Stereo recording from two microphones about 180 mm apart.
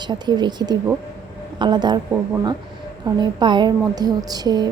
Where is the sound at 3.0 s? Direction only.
25° right (ahead or behind).